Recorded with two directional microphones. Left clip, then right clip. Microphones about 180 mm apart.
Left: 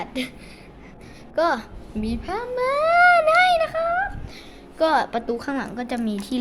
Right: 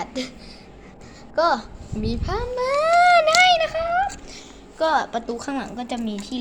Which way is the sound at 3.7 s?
5° right (ahead or behind).